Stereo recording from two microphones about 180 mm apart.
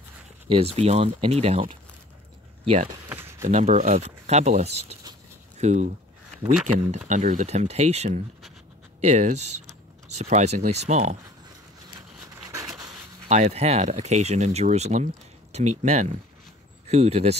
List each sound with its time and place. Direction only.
0.5 s speech: 35° right (ahead or behind)
3.1 s a sound: 10° right (ahead or behind)
3.4 s speech: 35° right (ahead or behind)
13.3 s speech: 40° right (ahead or behind)